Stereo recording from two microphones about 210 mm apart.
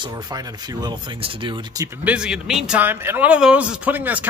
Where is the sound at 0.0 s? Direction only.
20° right (ahead or behind).